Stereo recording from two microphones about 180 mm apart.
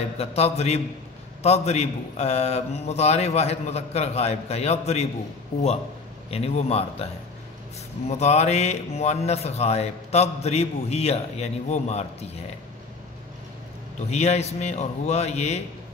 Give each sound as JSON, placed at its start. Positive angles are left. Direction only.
{"t": 0.2, "sound": "speech", "side_deg": 35}
{"t": 8.2, "sound": "speech", "side_deg": 35}
{"t": 14.1, "sound": "speech", "side_deg": 35}